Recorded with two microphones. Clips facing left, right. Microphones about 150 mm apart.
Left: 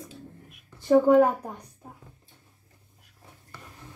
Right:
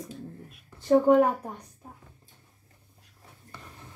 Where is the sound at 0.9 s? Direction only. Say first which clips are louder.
Left 2 dB; centre (ahead or behind).